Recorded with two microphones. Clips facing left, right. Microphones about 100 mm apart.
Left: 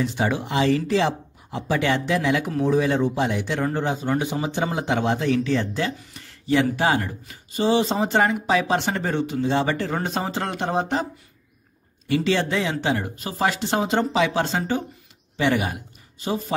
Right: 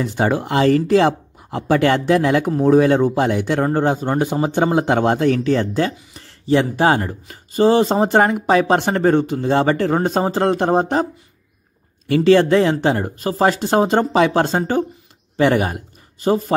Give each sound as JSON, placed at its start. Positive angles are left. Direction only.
{"t": 0.0, "sound": "speech", "side_deg": -50}
{"t": 12.1, "sound": "a man's voice", "side_deg": -45}